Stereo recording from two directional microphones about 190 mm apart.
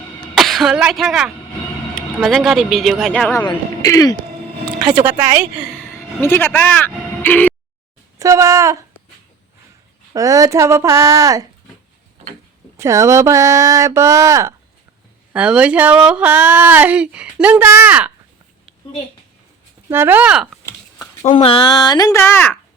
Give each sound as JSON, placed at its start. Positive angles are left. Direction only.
{"t": 0.3, "sound": "speech", "side_deg": 0}
{"t": 3.5, "sound": "speech", "side_deg": 20}
{"t": 5.2, "sound": "speech", "side_deg": -10}
{"t": 6.1, "sound": "speech", "side_deg": 10}
{"t": 8.2, "sound": "speech", "side_deg": -15}
{"t": 10.1, "sound": "speech", "side_deg": -15}
{"t": 12.7, "sound": "speech", "side_deg": -15}
{"t": 19.9, "sound": "speech", "side_deg": -10}
{"t": 20.7, "sound": "a sound", "side_deg": 15}
{"t": 21.2, "sound": "speech", "side_deg": 40}
{"t": 21.5, "sound": "speech", "side_deg": 20}